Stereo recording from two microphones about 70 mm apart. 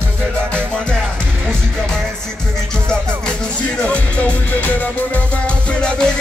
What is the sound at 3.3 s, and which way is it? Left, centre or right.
Music, centre.